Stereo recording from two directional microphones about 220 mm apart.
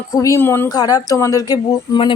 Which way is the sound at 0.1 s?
15° left (ahead or behind).